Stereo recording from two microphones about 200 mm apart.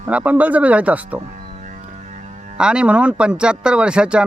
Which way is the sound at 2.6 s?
5° right (ahead or behind).